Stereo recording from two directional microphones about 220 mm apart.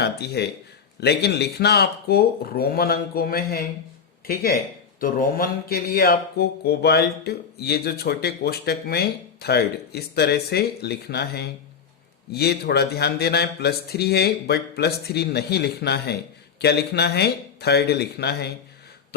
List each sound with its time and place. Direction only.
0.0 s speech: 50° left (ahead or behind)
4.9 s speech: 40° left (ahead or behind)